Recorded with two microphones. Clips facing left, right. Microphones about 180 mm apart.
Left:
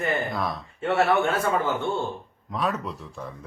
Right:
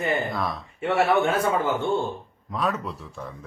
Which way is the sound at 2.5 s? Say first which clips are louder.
Right 1 dB; centre (ahead or behind).